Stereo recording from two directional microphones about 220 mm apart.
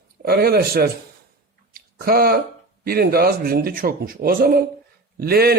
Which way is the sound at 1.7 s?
40° right (ahead or behind).